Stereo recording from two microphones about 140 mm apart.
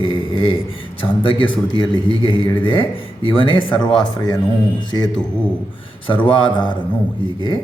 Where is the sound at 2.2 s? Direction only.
35° left (ahead or behind).